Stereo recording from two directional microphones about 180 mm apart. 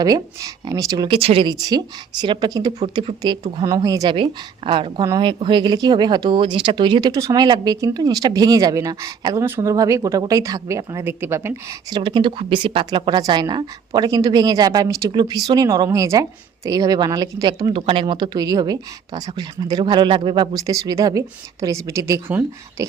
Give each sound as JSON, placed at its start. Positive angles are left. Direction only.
{"t": 0.0, "sound": "speech", "side_deg": -20}